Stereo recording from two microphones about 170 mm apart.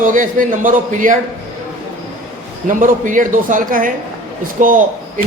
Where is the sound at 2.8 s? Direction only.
50° right (ahead or behind).